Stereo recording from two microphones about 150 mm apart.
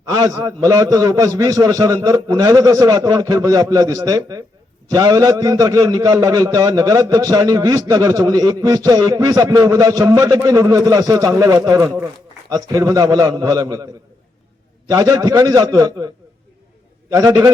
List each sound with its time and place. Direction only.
0.1 s a man's voice: 25° right (ahead or behind)
14.8 s a man's voice: 25° right (ahead or behind)
17.2 s a man's voice: 20° right (ahead or behind)